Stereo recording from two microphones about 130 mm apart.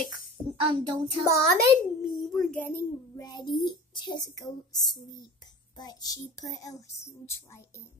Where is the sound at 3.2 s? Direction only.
30° left (ahead or behind).